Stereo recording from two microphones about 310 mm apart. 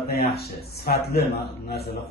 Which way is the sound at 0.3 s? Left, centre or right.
Left.